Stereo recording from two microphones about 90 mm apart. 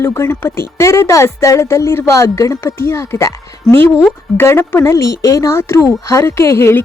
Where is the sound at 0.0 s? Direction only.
30° left (ahead or behind).